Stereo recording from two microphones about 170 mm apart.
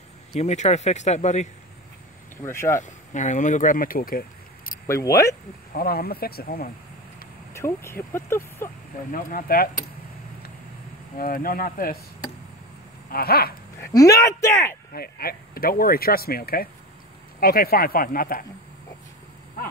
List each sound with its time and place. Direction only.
0.4 s speech: 40° left (ahead or behind)
2.4 s speech: 15° left (ahead or behind)
2.8 s speech: 45° left (ahead or behind)
4.8 s speech: 15° left (ahead or behind)
5.7 s speech: 60° left (ahead or behind)
7.5 s speech: 15° left (ahead or behind)
9.1 s speech: 55° left (ahead or behind)
11.1 s speech: 55° left (ahead or behind)
13.1 s speech: 65° left (ahead or behind)
13.7 s speech: 20° left (ahead or behind)
14.9 s speech: 60° left (ahead or behind)